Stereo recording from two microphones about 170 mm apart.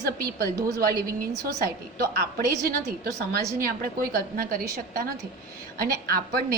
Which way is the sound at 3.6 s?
60° right (ahead or behind).